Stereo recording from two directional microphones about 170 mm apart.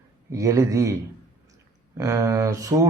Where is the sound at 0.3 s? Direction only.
20° right (ahead or behind).